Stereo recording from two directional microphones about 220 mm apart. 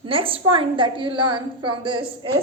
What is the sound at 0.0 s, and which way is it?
A woman's voice, 25° right (ahead or behind).